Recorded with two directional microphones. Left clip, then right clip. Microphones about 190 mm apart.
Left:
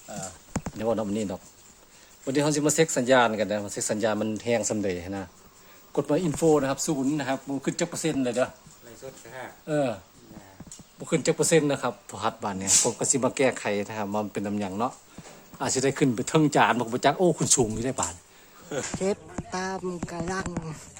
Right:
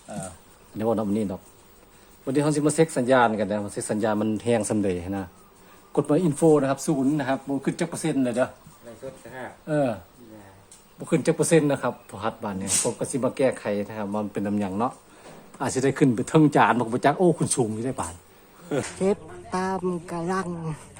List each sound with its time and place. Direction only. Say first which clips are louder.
0.8 s speech: right 3 dB; 5° left (ahead or behind)
9.6 s speech: right 2 dB; 15° left (ahead or behind)
11.0 s speech: right 2 dB; 10° left (ahead or behind)
12.1 s speech: left 1 dB; 25° left (ahead or behind)
18.9 s speech: right 2 dB; centre (ahead or behind)